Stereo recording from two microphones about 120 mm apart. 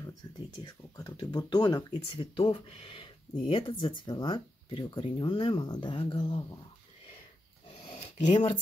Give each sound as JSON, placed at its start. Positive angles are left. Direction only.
{"t": 0.9, "sound": "speech", "side_deg": 35}